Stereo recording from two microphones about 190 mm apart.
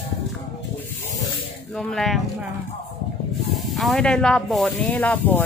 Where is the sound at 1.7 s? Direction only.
Centre (ahead or behind).